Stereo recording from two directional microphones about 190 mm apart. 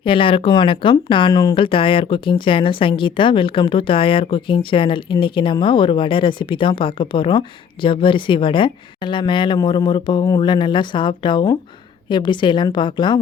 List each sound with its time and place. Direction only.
0.0 s speech: 25° left (ahead or behind)